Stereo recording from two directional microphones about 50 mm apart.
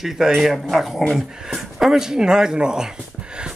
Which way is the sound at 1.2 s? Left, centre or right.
Centre.